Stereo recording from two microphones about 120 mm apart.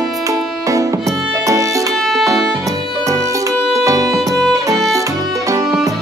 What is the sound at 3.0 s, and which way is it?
Music, 25° right (ahead or behind).